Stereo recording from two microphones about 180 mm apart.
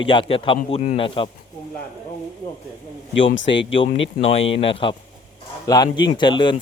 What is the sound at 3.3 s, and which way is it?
Speech, 85° left.